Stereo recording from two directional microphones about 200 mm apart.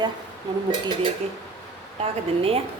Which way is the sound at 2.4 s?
30° right (ahead or behind).